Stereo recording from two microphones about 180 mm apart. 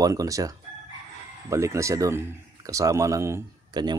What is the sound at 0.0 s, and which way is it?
Speech, 20° right (ahead or behind).